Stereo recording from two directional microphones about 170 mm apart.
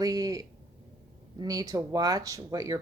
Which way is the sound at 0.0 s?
20° right (ahead or behind).